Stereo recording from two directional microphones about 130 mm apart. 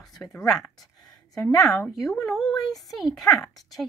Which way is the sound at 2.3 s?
Centre (ahead or behind).